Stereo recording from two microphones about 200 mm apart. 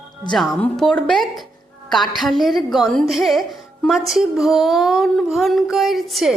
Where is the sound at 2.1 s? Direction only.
Centre (ahead or behind).